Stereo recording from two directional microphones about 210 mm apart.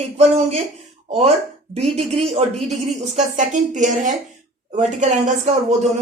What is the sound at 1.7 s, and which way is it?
Speech, 30° right (ahead or behind).